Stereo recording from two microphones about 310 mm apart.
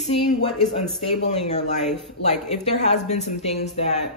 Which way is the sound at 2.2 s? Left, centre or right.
Left.